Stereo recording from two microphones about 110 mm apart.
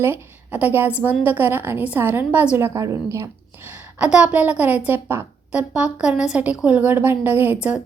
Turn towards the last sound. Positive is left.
turn(degrees=-15)  # may be behind; listen again after turning